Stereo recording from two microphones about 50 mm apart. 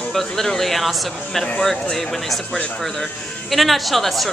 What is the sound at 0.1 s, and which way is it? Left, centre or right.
A woman's voice, centre.